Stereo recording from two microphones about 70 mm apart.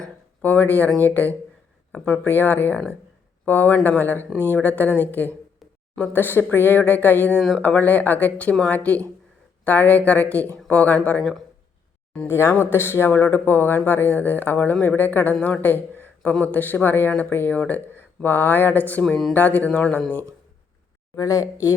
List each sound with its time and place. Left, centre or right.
0.0 s a sound: left
1.9 s speech: centre
7.3 s speech: centre
7.6 s speech: left
11.2 s speech: centre
12.3 s speech: left
21.2 s speech: left